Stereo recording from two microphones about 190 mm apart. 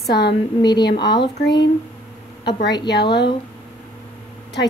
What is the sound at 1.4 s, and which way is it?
Speech, 65° left (ahead or behind).